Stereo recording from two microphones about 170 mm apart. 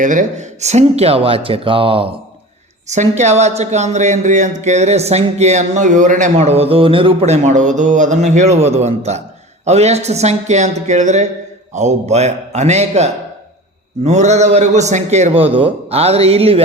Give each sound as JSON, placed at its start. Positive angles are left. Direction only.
{"t": 0.0, "sound": "speech", "side_deg": -50}
{"t": 2.8, "sound": "speech", "side_deg": -45}